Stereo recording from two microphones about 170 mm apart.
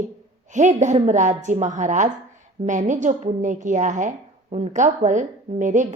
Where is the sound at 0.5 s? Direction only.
45° right (ahead or behind).